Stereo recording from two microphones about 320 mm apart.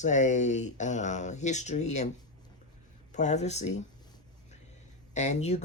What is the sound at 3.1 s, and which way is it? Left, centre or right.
Speech, left.